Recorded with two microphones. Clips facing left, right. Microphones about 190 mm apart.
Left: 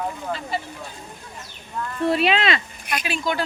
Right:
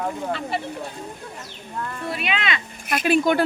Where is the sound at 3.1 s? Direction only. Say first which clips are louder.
Right 9 dB; 55° right (ahead or behind).